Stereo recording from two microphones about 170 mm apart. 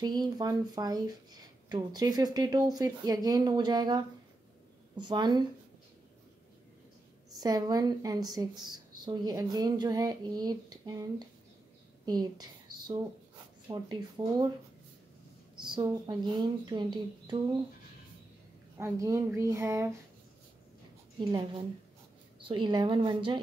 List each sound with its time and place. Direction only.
0.0 s speech: 25° right (ahead or behind)
7.3 s a woman's voice: 20° right (ahead or behind)
15.6 s speech: 25° right (ahead or behind)
18.8 s speech: 15° right (ahead or behind)
21.2 s speech: 25° right (ahead or behind)